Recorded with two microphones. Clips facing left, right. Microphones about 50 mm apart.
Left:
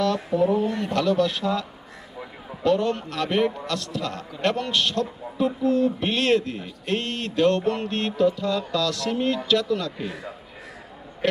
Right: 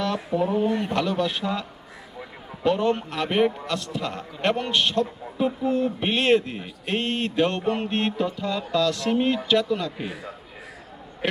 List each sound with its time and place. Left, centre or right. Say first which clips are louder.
0.3 s speech: left 1 dB; centre
2.6 s a man's voice: even; centre